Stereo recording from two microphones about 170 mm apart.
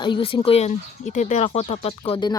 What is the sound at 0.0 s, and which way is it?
Speech, 30° left (ahead or behind).